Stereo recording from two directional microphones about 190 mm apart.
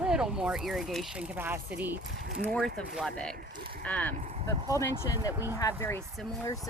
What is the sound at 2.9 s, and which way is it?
Speech, 5° left (ahead or behind).